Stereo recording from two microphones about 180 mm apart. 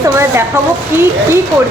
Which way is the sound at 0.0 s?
15° right (ahead or behind).